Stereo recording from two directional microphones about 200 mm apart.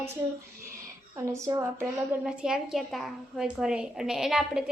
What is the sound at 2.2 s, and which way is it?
A woman's voice, 5° right (ahead or behind).